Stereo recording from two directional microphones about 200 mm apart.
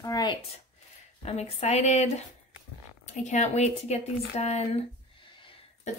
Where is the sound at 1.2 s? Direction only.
30° left (ahead or behind).